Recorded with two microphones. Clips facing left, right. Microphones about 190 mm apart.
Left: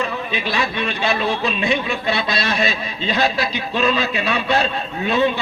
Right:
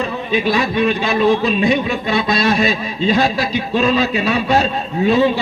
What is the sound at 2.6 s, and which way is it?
A man's voice, 40° right (ahead or behind).